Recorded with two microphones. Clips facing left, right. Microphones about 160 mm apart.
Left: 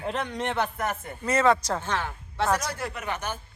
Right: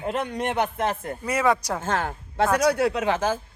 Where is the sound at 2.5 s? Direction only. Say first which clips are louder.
Right 11 dB; 70° right (ahead or behind); by 3.4 s 90° right.